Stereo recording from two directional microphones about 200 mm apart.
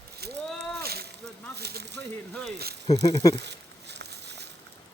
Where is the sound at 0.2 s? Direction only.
55° right (ahead or behind).